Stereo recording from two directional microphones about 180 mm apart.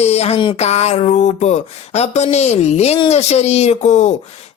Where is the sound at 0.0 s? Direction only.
35° left (ahead or behind).